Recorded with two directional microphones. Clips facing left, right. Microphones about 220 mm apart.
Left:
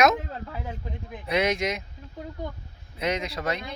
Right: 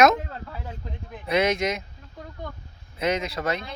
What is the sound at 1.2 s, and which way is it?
Speech, centre (ahead or behind).